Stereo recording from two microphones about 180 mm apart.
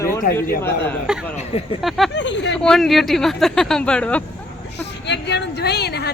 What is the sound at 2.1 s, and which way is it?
Speech, 90° left.